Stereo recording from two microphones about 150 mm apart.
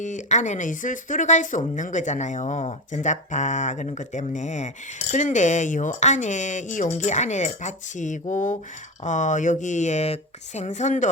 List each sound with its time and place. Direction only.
0.0 s speech: 55° left (ahead or behind)